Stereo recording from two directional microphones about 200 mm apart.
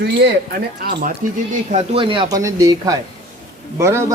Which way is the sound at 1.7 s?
25° right (ahead or behind).